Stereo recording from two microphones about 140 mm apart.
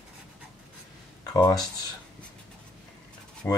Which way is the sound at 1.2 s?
25° left (ahead or behind).